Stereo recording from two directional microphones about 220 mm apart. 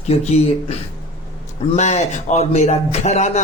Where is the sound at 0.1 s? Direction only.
30° left (ahead or behind).